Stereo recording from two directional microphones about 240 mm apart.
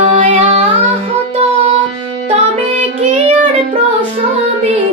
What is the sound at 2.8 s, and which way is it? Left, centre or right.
Child singing, right.